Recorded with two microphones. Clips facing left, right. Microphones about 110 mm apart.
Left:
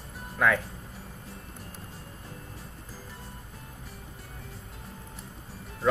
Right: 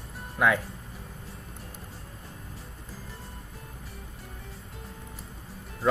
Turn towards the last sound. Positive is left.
turn(degrees=0)  # may be behind; listen again after turning